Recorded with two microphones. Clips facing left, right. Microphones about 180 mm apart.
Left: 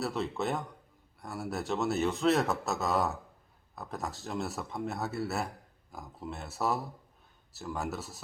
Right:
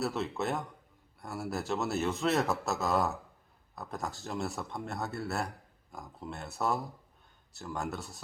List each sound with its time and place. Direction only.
0.0 s a man's voice: centre (ahead or behind)